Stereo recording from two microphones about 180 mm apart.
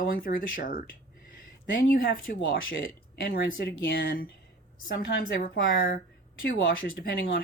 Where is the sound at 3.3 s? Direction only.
65° left (ahead or behind).